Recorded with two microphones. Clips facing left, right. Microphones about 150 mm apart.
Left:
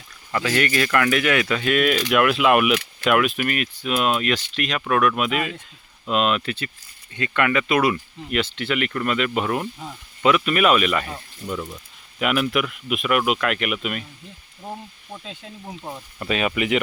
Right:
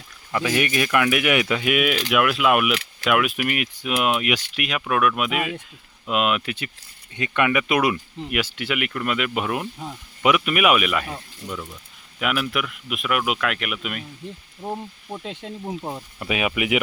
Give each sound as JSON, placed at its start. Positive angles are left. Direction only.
{"t": 0.3, "sound": "speech", "side_deg": -15}
{"t": 11.4, "sound": "speech", "side_deg": 10}
{"t": 12.2, "sound": "speech", "side_deg": 0}
{"t": 14.6, "sound": "speech", "side_deg": -25}
{"t": 16.1, "sound": "speech", "side_deg": -5}